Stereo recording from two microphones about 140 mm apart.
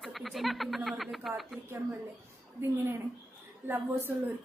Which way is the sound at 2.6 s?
15° right (ahead or behind).